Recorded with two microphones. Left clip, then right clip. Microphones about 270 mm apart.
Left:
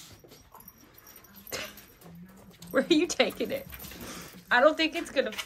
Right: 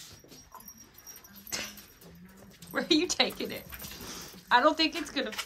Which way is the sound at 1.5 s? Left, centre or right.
Centre.